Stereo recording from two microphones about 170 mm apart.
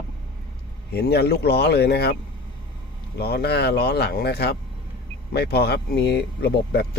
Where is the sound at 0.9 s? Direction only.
70° left (ahead or behind).